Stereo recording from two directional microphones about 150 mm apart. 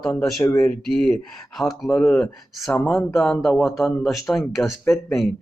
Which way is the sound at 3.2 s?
Centre (ahead or behind).